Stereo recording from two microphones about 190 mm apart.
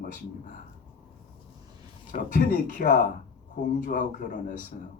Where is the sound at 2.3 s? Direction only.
45° left (ahead or behind).